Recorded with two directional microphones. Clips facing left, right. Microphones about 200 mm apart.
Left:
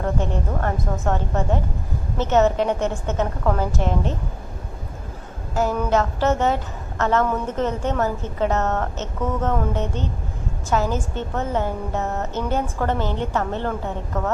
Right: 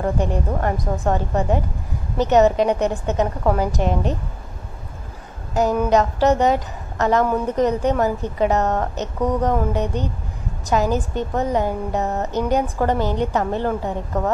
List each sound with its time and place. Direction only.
0.0 s a woman's voice: 15° right (ahead or behind)
5.5 s a woman's voice: 15° right (ahead or behind)